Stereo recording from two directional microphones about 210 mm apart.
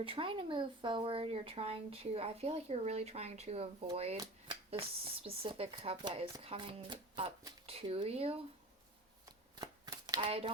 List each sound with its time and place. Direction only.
0.0 s speech: 25° right (ahead or behind)
9.2 s shuffling cards: 15° right (ahead or behind)